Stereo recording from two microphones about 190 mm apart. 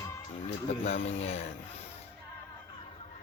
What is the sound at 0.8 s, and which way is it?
Speech, 35° left (ahead or behind).